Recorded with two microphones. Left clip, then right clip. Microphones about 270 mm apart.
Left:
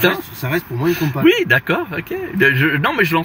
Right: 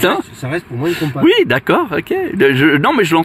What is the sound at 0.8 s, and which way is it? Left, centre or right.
Speech, right.